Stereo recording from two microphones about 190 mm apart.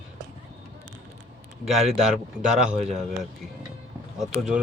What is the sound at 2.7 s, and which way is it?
Speech, 35° right (ahead or behind).